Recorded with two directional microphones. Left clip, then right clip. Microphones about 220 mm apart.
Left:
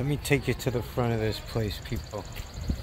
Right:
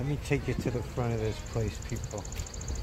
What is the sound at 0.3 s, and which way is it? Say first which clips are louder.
Speech: left 5 dB; 50° left (ahead or behind).